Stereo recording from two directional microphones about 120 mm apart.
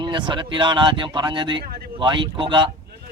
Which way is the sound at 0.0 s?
40° right (ahead or behind).